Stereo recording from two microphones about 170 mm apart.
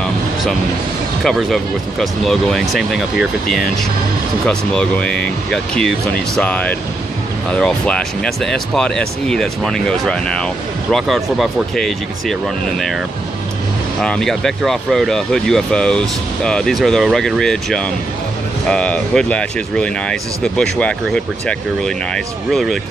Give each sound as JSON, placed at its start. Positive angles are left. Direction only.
{"t": 1.2, "sound": "speech", "side_deg": 0}
{"t": 4.5, "sound": "speech", "side_deg": 5}
{"t": 14.0, "sound": "speech", "side_deg": 5}